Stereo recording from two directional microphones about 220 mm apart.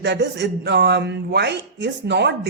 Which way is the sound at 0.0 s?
50° right (ahead or behind).